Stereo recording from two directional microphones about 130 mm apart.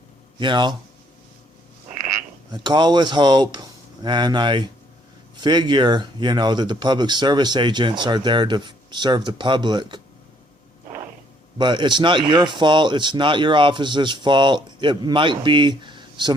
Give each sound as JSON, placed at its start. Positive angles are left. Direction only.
{"t": 0.3, "sound": "speech", "side_deg": -40}
{"t": 2.5, "sound": "speech", "side_deg": -35}
{"t": 11.5, "sound": "speech", "side_deg": -35}